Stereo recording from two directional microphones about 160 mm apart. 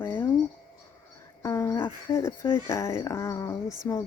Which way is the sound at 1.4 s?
15° left (ahead or behind).